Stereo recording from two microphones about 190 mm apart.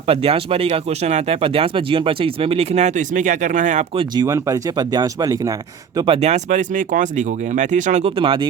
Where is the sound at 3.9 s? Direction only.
25° right (ahead or behind).